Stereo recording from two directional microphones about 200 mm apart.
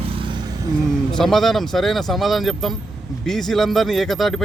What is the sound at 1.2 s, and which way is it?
Speech, centre (ahead or behind).